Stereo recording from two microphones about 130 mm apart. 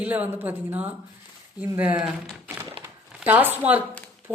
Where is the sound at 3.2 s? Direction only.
15° right (ahead or behind).